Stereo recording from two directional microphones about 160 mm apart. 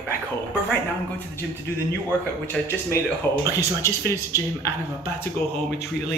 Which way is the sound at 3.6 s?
20° left (ahead or behind).